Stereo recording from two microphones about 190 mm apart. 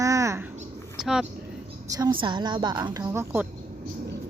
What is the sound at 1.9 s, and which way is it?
A woman's voice, 20° right (ahead or behind).